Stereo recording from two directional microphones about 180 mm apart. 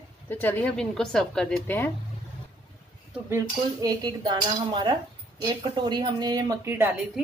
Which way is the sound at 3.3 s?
20° right (ahead or behind).